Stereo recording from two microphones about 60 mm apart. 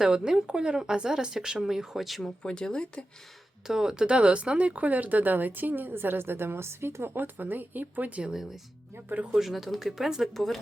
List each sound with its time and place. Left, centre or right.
0.0 s speech: centre
2.4 s speech: centre
3.7 s speech: centre; by 8.2 s right
8.2 s speech: centre
9.0 s speech: right
9.3 s speech: centre